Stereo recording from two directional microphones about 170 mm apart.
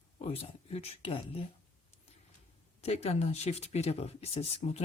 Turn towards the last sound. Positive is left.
turn(degrees=35)  # may be behind; listen again after turning